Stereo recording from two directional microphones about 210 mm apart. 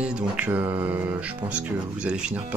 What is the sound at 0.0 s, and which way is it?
Speech, 5° right (ahead or behind).